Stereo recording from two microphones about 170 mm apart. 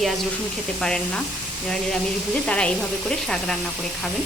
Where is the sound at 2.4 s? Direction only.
5° left (ahead or behind).